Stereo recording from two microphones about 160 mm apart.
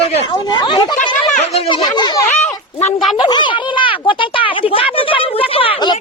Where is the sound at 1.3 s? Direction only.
45° left (ahead or behind); by 2.2 s 25° left (ahead or behind).